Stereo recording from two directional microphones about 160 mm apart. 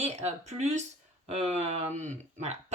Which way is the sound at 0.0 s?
40° right (ahead or behind).